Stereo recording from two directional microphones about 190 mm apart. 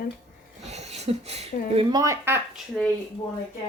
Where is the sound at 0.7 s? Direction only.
35° right (ahead or behind).